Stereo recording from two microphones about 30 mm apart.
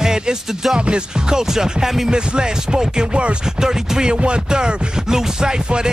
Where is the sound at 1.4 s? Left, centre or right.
Centre.